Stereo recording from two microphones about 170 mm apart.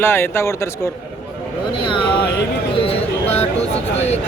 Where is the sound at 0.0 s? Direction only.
15° left (ahead or behind).